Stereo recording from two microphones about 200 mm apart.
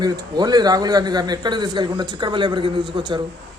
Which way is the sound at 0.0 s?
20° right (ahead or behind).